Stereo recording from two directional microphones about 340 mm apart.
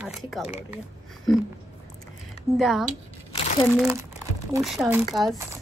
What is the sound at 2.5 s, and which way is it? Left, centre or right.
Speech, centre.